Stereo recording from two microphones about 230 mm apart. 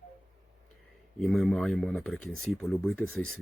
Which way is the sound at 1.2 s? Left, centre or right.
Centre.